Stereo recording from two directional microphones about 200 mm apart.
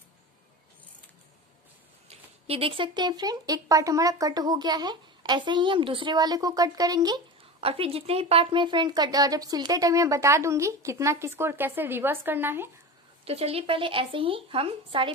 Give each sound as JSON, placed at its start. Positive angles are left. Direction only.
{"t": 2.0, "sound": "a woman's voice", "side_deg": -30}
{"t": 13.2, "sound": "speech", "side_deg": -30}